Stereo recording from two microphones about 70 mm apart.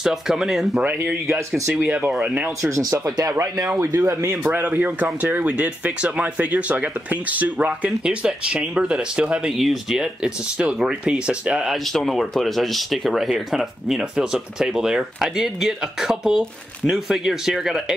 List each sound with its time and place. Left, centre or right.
0.0 s speech: centre
1.8 s speech: right
2.6 s speech: right
4.3 s speech: right
9.6 s speech: centre
11.7 s speech: centre